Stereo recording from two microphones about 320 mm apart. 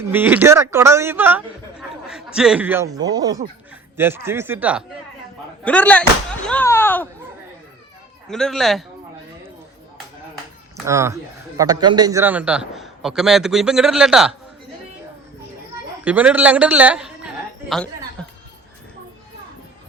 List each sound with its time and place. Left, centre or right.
0.1 s a man's voice: centre
8.3 s a man's voice: centre
10.8 s a man's voice: centre
16.0 s a man's voice: centre
17.7 s a sound: centre